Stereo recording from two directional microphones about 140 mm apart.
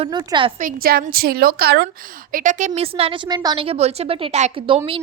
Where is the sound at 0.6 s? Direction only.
90° right.